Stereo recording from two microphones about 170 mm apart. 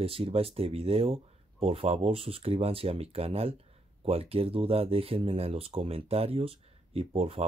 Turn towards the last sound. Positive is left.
turn(degrees=-35)  # may be behind; listen again after turning